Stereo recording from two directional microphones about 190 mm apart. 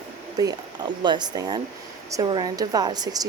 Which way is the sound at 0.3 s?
20° right (ahead or behind).